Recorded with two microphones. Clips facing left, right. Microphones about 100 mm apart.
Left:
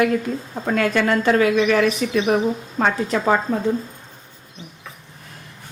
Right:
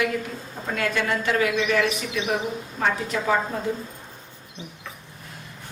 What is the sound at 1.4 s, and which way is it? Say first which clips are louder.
A woman's voice: left 5 dB; 60° left (ahead or behind).